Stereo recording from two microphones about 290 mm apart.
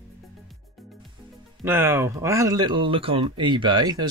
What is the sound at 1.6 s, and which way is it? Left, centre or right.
Speech, centre.